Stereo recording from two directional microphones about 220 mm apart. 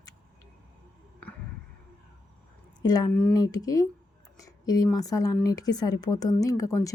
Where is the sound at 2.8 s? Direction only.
15° left (ahead or behind).